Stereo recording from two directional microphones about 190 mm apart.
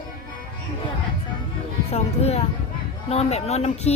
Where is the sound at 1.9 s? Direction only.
35° left (ahead or behind).